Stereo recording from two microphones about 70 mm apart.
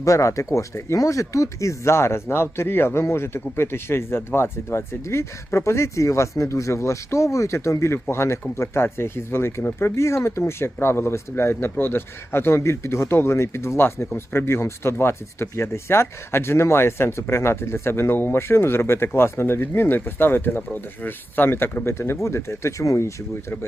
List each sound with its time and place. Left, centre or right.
0.0 s speech: left